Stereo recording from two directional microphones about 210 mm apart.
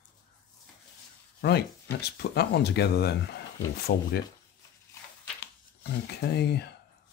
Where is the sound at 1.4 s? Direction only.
50° left (ahead or behind).